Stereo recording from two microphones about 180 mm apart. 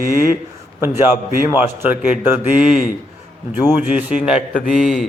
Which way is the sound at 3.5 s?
10° right (ahead or behind).